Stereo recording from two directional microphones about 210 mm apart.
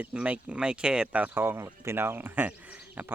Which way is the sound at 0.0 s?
5° right (ahead or behind).